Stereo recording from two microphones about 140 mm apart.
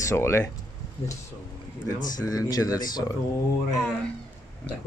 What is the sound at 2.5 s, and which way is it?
Speech, 25° left (ahead or behind).